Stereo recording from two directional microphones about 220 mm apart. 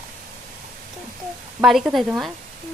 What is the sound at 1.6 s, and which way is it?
Speech, centre (ahead or behind).